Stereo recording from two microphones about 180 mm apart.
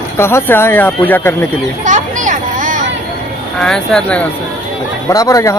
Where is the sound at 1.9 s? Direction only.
45° right (ahead or behind).